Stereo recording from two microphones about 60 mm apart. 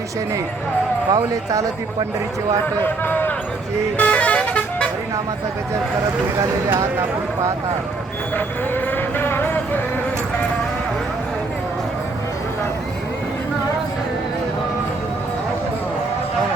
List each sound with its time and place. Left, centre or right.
1.1 s speech: right
2.8 s speech: left
3.9 s vehicle: left
8.7 s music: left